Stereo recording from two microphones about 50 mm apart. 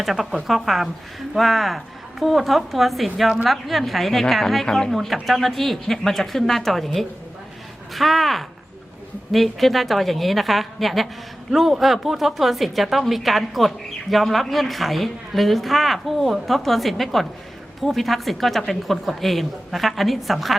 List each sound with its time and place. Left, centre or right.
0.0 s a woman's voice: centre